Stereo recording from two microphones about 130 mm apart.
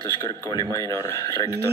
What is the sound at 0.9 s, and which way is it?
Speech, 25° left (ahead or behind).